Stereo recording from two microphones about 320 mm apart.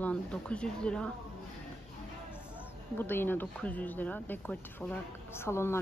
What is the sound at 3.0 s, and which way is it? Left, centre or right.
A woman's voice, centre.